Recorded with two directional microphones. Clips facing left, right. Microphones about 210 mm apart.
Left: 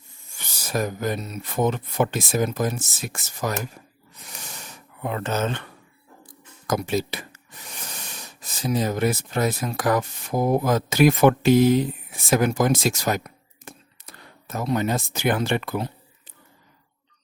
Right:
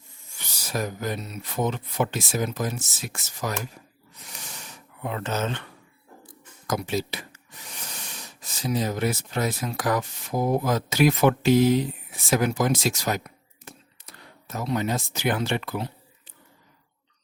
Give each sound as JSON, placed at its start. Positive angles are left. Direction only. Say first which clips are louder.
{"t": 0.3, "sound": "speech", "louder": "left 3 dB", "side_deg": 50}
{"t": 4.3, "sound": "a sound", "louder": "left 2 dB", "side_deg": 45}
{"t": 6.7, "sound": "speech", "louder": "left 3 dB", "side_deg": 50}